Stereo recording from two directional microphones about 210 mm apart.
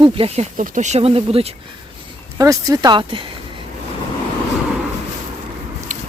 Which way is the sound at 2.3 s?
15° right (ahead or behind).